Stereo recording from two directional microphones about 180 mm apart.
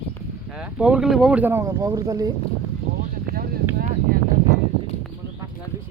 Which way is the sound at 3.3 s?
55° right (ahead or behind).